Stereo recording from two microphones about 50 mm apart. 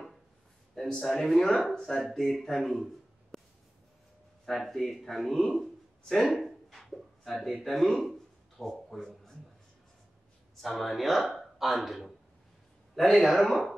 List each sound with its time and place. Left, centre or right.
0.7 s speech: centre
2.3 s a man's voice: centre
3.3 s a sound: centre
4.5 s a man's voice: centre
10.6 s a man's voice: centre